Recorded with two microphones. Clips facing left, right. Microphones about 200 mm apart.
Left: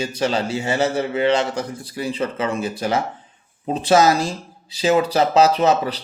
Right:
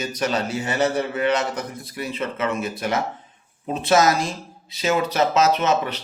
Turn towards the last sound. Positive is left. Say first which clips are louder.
# left 3 dB
turn(degrees=35)  # may be behind; listen again after turning